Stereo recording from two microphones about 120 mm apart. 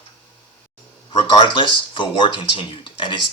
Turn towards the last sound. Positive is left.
turn(degrees=40)  # may be behind; listen again after turning